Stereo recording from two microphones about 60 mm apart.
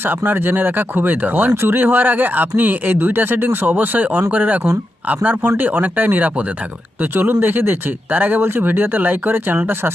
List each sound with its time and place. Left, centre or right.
0.0 s speech: right